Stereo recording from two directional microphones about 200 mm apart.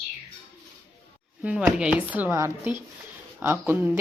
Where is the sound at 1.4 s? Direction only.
5° right (ahead or behind).